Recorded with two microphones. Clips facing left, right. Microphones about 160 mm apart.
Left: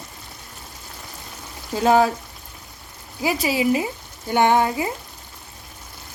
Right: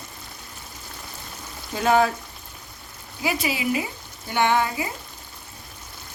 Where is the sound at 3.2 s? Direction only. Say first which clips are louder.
Left 5 dB; 40° left (ahead or behind).